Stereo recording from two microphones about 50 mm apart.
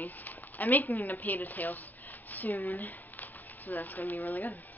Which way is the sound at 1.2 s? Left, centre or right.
Left.